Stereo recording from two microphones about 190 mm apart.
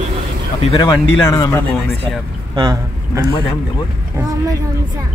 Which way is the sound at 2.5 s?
20° right (ahead or behind).